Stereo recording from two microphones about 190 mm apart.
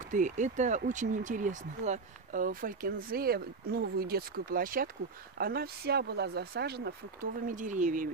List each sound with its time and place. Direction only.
0.1 s speech: 40° right (ahead or behind); by 6.9 s 60° right (ahead or behind)
7.4 s speech: 40° right (ahead or behind)